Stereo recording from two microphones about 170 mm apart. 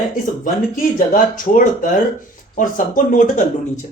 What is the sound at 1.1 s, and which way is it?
Speech, 50° left (ahead or behind).